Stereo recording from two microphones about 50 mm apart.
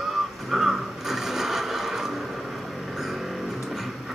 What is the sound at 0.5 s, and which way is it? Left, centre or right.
Mechanisms, centre.